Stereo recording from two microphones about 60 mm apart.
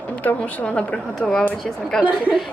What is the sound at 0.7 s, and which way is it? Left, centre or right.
Speech, centre.